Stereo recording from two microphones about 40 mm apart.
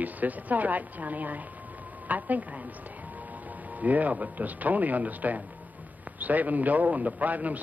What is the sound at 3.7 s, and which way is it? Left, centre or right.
Speech, right.